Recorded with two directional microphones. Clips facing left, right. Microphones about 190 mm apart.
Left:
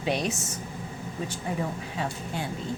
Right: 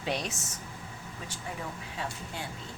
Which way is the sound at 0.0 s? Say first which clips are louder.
Left 6 dB; 15° left (ahead or behind).